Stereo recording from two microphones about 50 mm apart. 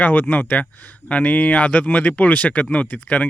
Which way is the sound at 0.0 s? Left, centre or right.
Left.